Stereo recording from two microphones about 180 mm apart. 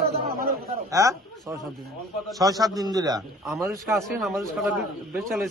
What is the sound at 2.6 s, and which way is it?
Speech, 20° right (ahead or behind).